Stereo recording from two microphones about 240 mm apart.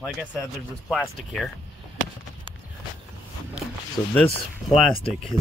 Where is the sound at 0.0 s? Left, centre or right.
Centre.